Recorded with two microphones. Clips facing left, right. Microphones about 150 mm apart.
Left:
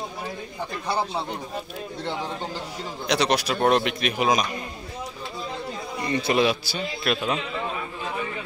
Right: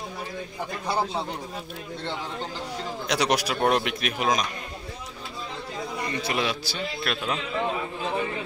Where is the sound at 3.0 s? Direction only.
10° right (ahead or behind).